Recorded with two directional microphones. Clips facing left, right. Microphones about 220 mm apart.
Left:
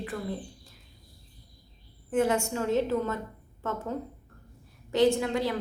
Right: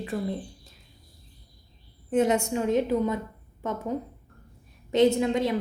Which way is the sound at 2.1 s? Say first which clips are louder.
Right 3 dB; 20° right (ahead or behind).